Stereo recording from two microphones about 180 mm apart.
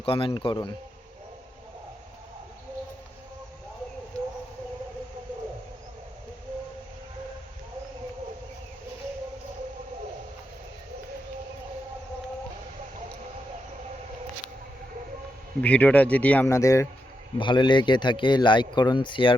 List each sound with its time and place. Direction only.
0.0 s speech: 30° left (ahead or behind)
15.6 s speech: 10° left (ahead or behind); by 19.3 s 25° left (ahead or behind)